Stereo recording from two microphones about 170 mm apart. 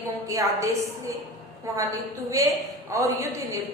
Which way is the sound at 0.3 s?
20° right (ahead or behind).